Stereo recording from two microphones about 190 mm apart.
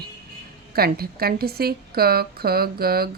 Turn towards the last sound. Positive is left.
turn(degrees=-55)  # may be behind; listen again after turning